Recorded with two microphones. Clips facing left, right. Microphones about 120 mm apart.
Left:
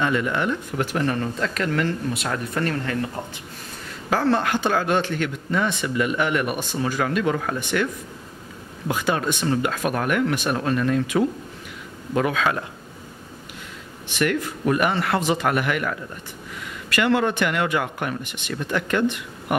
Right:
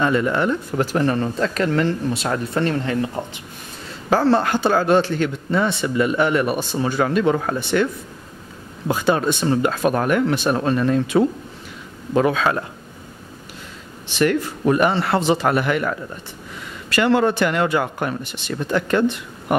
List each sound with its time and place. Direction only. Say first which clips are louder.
0.0 s speech: right 4 dB; 35° right (ahead or behind)
4.1 s speech: right 4 dB; 30° right (ahead or behind)
14.0 s speech: right 4 dB; 30° right (ahead or behind)